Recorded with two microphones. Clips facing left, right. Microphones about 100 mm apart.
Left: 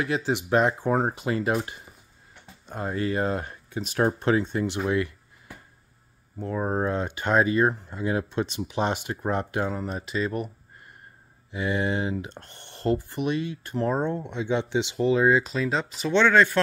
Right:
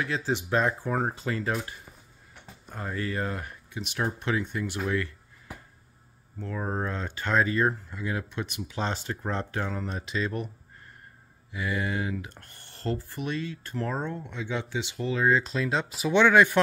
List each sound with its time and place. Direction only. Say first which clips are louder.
0.0 s speech: left 3 dB; 20° left (ahead or behind)
2.6 s speech: left 5 dB; 25° left (ahead or behind)
6.4 s speech: left 5 dB; 20° left (ahead or behind); by 10.5 s 5° left (ahead or behind)
11.5 s speech: left 4 dB; 25° left (ahead or behind); by 16.5 s 15° right (ahead or behind)